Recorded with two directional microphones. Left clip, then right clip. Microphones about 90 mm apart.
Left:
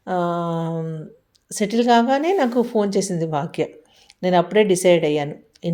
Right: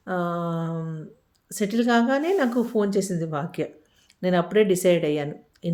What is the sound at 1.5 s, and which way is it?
A woman's voice, 25° left (ahead or behind).